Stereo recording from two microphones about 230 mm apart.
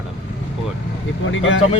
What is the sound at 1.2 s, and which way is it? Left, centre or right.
Speech, left.